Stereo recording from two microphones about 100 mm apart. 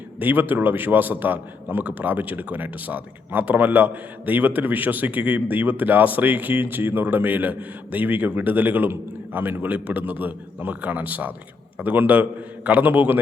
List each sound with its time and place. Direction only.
0.2 s a man's voice: 20° right (ahead or behind)